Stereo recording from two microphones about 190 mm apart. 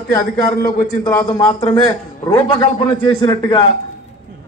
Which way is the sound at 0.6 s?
45° left (ahead or behind).